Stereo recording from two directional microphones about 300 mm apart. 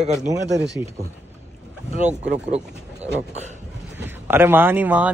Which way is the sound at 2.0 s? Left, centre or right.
Right.